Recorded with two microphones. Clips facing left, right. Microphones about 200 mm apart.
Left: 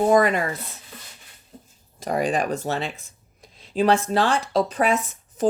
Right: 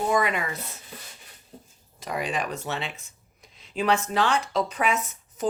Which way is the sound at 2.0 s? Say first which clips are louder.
Left 7 dB; 45° left (ahead or behind).